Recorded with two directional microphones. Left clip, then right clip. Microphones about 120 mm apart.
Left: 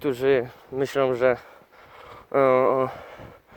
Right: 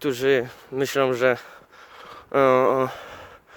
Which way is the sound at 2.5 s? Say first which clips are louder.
Right 1 dB; 35° right (ahead or behind).